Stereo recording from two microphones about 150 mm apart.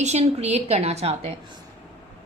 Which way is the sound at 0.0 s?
50° right (ahead or behind).